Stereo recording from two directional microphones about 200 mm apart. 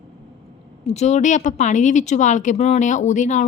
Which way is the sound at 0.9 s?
35° left (ahead or behind).